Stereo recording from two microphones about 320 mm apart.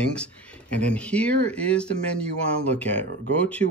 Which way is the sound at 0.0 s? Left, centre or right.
Centre.